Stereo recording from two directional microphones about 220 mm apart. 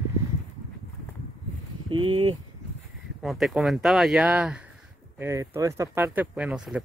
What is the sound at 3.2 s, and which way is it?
Speech, centre (ahead or behind).